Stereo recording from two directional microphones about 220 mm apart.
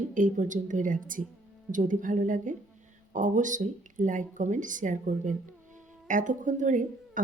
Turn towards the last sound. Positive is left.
turn(degrees=-35)  # may be behind; listen again after turning